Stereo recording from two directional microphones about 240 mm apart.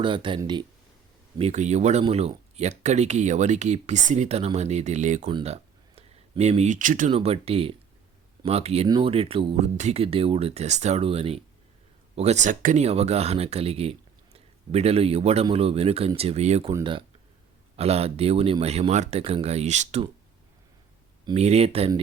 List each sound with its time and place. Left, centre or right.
0.0 s speech: centre
5.3 s a sound: right
7.1 s speech: right
21.2 s speech: right